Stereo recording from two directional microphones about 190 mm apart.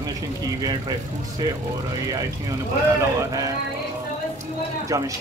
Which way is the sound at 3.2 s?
20° right (ahead or behind).